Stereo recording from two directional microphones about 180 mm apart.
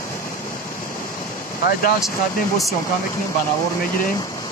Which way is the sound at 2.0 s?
15° left (ahead or behind).